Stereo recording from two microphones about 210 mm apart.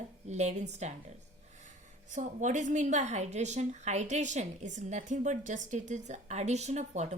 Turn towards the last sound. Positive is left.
turn(degrees=-35)  # may be behind; listen again after turning